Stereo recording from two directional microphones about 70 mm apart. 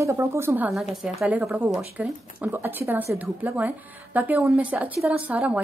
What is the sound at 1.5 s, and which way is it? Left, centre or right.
Speech, right.